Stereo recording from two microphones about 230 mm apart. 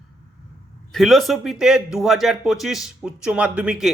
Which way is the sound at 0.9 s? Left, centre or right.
Centre.